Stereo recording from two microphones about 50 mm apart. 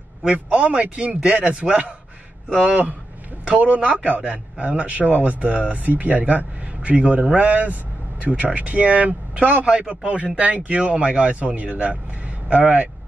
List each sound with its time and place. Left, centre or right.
0.3 s a man's voice: right